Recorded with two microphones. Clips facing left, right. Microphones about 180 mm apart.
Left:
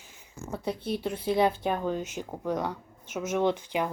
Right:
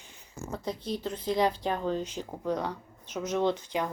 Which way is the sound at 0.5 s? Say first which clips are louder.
Left 3 dB; 10° left (ahead or behind).